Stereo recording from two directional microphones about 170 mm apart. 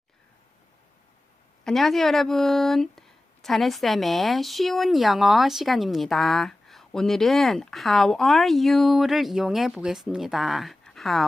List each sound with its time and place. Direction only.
1.6 s speech: centre (ahead or behind)